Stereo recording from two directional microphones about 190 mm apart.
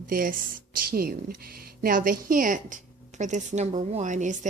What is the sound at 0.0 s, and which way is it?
Speech, 50° right (ahead or behind).